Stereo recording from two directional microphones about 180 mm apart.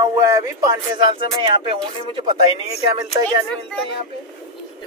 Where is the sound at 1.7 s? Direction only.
30° right (ahead or behind).